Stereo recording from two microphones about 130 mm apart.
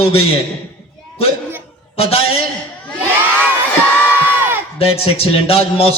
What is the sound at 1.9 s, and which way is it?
Speech, 50° left (ahead or behind).